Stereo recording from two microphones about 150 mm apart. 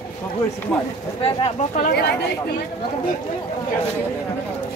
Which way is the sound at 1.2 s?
40° left (ahead or behind).